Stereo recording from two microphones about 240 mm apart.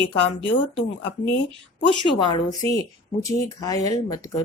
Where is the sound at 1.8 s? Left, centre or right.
Centre.